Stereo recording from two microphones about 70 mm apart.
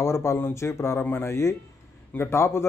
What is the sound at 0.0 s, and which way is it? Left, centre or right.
Speech, left.